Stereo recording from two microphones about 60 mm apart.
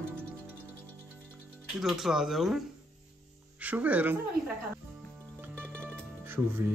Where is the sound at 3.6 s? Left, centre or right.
Right.